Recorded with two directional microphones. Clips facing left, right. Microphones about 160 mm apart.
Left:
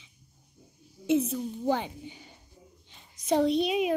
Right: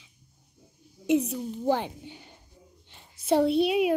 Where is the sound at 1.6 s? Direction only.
10° right (ahead or behind).